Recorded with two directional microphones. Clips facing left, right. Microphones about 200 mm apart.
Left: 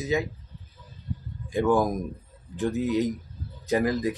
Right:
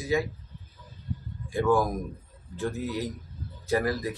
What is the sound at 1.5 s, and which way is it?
Speech, 20° left (ahead or behind).